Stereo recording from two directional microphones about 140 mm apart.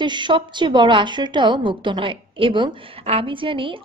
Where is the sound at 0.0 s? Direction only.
35° right (ahead or behind).